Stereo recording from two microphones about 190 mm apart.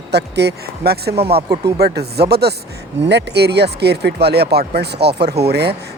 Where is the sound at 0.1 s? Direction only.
60° right (ahead or behind).